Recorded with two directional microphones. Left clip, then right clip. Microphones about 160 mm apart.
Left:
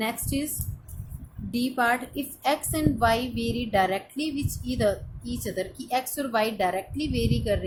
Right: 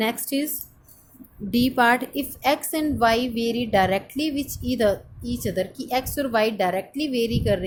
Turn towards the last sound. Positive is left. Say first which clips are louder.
# right 4 dB
turn(degrees=-35)  # may be behind; listen again after turning